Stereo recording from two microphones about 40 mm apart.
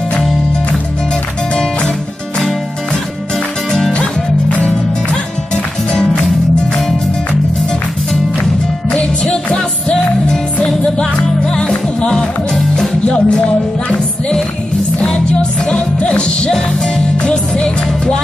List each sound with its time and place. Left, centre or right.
1.5 s music: left
4.0 s music: left
8.9 s music: left
12.5 s music: centre
13.0 s music: left
15.7 s music: left